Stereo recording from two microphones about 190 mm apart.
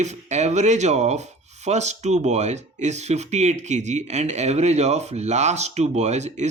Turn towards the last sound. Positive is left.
turn(degrees=-35)  # may be behind; listen again after turning